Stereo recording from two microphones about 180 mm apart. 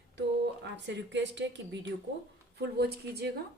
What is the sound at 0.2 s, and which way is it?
A woman's voice, 75° right (ahead or behind).